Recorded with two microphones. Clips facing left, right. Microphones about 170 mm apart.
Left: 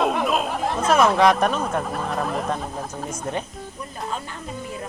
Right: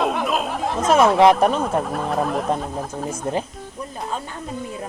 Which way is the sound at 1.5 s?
5° right (ahead or behind).